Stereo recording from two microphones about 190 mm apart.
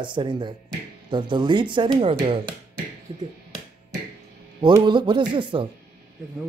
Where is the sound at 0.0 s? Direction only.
25° right (ahead or behind).